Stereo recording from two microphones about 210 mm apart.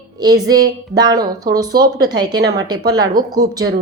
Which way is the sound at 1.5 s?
20° right (ahead or behind).